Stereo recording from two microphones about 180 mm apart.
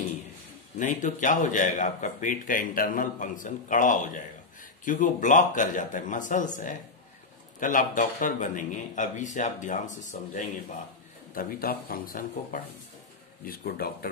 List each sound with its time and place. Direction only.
0.7 s speech: 45° left (ahead or behind)